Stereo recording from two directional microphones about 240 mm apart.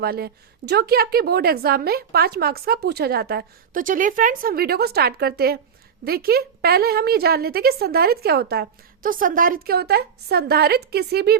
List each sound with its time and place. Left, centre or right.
0.0 s a woman's voice: right